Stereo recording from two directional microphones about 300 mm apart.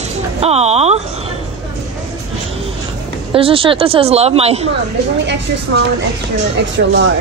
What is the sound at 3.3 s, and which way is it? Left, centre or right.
Speech, centre.